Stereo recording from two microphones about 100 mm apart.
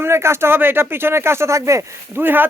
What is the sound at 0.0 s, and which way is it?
A man's voice, 25° right (ahead or behind).